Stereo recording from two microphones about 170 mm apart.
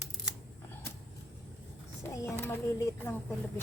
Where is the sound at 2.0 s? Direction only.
15° left (ahead or behind).